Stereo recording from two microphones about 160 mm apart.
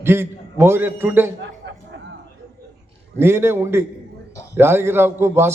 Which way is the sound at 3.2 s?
15° right (ahead or behind).